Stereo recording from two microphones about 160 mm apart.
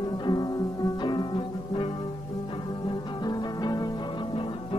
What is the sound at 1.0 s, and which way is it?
Music, 30° left (ahead or behind).